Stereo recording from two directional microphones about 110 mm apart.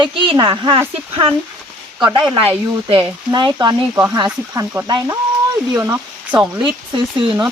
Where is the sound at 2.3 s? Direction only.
55° right (ahead or behind).